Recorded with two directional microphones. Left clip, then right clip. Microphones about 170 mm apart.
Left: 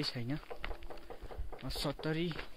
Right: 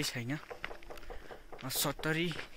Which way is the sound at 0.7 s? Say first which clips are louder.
Right 1 dB; 30° right (ahead or behind).